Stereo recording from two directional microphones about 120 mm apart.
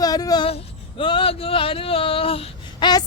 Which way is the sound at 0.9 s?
45° left (ahead or behind).